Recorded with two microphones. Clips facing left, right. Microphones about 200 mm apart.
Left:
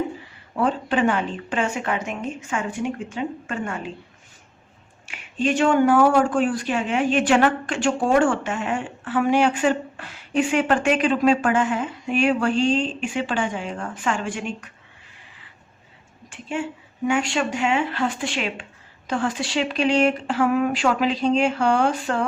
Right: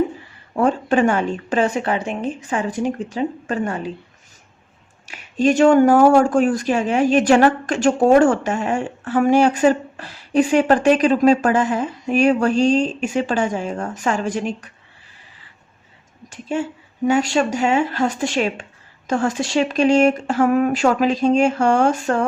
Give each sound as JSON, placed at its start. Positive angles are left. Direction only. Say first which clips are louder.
{"t": 0.5, "sound": "speech", "louder": "right 5 dB", "side_deg": -45}
{"t": 5.0, "sound": "speech", "louder": "right 6 dB", "side_deg": -40}
{"t": 16.3, "sound": "speech", "louder": "right 4 dB", "side_deg": -40}